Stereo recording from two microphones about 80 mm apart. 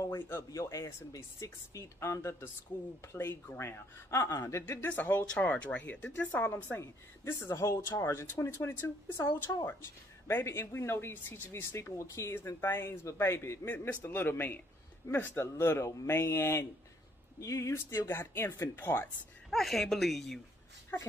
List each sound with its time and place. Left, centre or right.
0.0 s a sound: left
0.5 s speech: left
4.9 s a man's voice: left
9.2 s a woman's voice: left
10.2 s a man's voice: left
19.5 s speech: centre
20.9 s a man's voice: left